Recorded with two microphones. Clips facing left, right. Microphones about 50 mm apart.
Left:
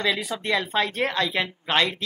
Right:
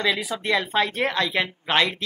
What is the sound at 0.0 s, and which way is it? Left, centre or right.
A man's voice, centre.